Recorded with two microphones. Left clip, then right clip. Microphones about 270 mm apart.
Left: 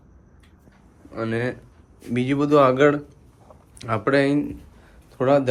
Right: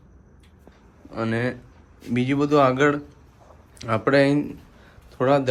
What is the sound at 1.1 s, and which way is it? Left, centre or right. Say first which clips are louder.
Speech: even; centre.